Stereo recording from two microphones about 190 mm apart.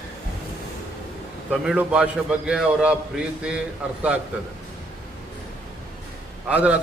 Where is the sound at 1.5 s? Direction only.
5° right (ahead or behind).